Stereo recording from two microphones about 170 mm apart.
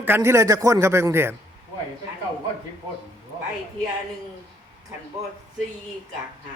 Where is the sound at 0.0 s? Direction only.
15° right (ahead or behind).